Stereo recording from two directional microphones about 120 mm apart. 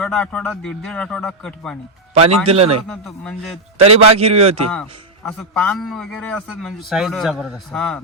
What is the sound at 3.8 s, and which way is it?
Speech, 55° right (ahead or behind).